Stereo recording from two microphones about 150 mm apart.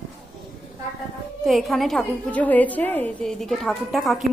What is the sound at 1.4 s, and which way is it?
A woman's voice, centre (ahead or behind).